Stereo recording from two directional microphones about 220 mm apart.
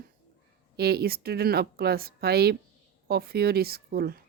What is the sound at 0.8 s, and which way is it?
Speech, 45° right (ahead or behind).